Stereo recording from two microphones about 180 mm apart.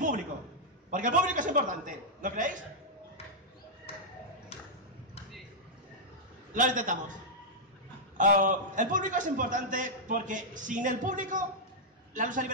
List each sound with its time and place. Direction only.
0.8 s a man's voice: 45° right (ahead or behind)
6.5 s a man's voice: 45° right (ahead or behind)
8.2 s a man's voice: 45° right (ahead or behind)